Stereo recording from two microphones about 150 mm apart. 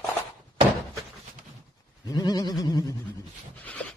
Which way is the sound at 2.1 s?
25° left (ahead or behind).